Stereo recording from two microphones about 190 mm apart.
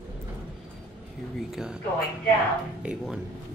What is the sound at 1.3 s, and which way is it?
Speech, centre (ahead or behind).